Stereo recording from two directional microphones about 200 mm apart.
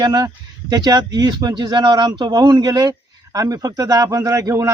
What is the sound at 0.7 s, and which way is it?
A man's voice, 20° right (ahead or behind).